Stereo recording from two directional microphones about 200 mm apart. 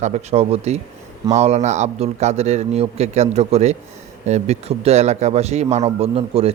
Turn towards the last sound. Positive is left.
turn(degrees=-30)  # may be behind; listen again after turning